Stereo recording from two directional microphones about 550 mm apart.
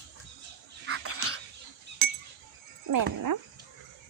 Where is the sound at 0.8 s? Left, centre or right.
Right.